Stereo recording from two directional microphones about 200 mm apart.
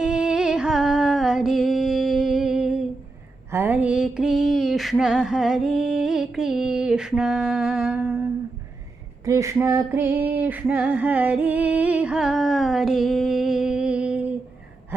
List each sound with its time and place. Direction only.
0.0 s music: 5° right (ahead or behind)
3.5 s a sound: 10° right (ahead or behind)
9.2 s female singing: 15° right (ahead or behind)